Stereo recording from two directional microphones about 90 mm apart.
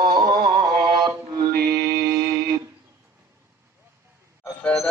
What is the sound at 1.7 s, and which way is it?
Music, 45° right (ahead or behind).